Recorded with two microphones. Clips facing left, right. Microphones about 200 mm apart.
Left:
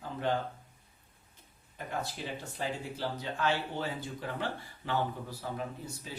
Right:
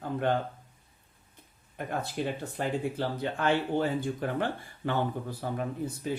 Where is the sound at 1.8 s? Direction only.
55° right (ahead or behind).